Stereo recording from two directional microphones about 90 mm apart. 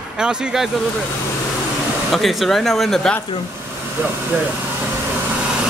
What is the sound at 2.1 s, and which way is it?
Speech, centre (ahead or behind).